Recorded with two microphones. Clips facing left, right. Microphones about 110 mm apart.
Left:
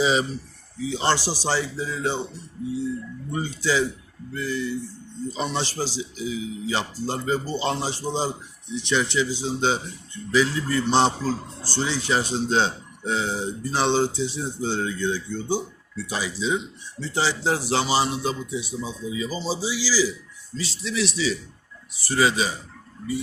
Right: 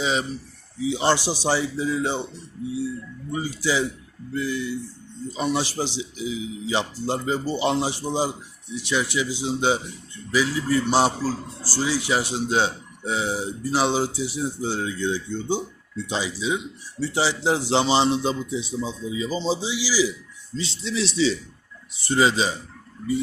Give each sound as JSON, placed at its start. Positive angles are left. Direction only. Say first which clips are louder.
{"t": 0.0, "sound": "speech", "louder": "left 3 dB", "side_deg": 0}
{"t": 0.9, "sound": "a man's voice", "louder": "right 2 dB", "side_deg": -15}
{"t": 3.3, "sound": "a man's voice", "louder": "even", "side_deg": -10}
{"t": 20.6, "sound": "speech", "louder": "even", "side_deg": -30}